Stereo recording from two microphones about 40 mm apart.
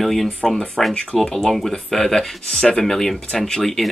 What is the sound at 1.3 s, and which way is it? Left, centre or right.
Speech, centre.